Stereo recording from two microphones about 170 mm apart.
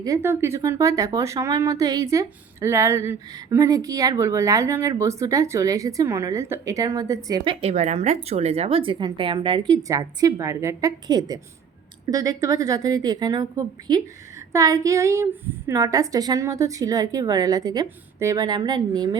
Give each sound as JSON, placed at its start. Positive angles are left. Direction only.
{"t": 0.0, "sound": "speech", "side_deg": -15}
{"t": 7.6, "sound": "speech", "side_deg": -40}